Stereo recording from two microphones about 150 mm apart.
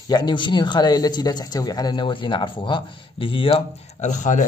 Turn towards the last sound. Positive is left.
turn(degrees=55)  # may be behind; listen again after turning